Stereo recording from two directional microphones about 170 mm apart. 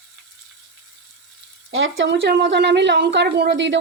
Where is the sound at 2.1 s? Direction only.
85° right.